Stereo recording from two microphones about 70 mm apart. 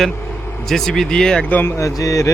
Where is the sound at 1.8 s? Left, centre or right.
Left.